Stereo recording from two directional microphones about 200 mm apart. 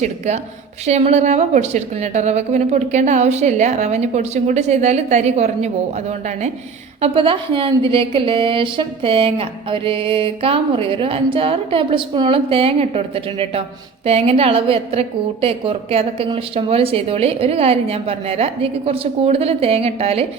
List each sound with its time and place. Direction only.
0.9 s a woman's voice: 35° right (ahead or behind)